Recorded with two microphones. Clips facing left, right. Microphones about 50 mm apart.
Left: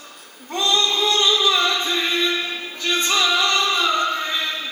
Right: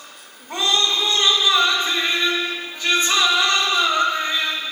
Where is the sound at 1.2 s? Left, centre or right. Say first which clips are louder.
Right 3 dB; centre.